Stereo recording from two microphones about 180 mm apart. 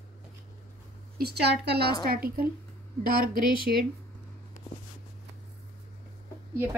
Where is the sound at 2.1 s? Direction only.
55° right (ahead or behind).